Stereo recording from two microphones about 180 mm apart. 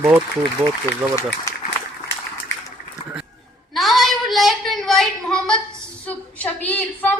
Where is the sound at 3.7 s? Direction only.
Centre (ahead or behind).